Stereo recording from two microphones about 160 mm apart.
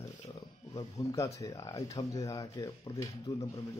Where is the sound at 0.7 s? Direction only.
25° left (ahead or behind).